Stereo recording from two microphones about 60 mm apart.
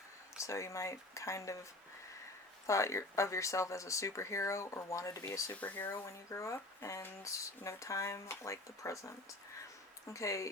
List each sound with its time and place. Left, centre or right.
0.3 s speech: left
2.6 s speech: left
5.7 s speech: left
6.1 s speech: left